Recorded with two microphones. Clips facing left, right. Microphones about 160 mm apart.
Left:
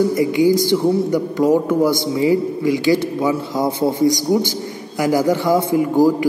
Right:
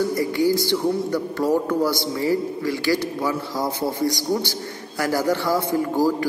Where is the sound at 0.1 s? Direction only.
20° left (ahead or behind).